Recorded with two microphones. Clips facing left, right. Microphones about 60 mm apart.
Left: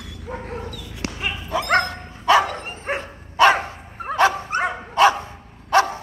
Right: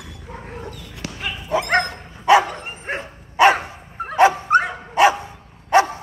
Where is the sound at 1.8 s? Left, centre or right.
Right.